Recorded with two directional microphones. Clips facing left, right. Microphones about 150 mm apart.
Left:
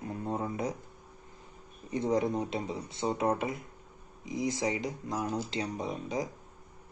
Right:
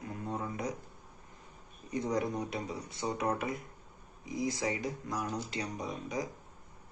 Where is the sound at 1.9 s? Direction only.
25° left (ahead or behind).